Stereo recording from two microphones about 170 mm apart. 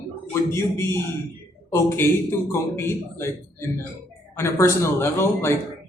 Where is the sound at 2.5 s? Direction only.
15° left (ahead or behind).